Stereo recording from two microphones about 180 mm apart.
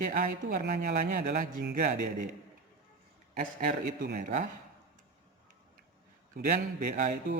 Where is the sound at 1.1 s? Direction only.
50° right (ahead or behind).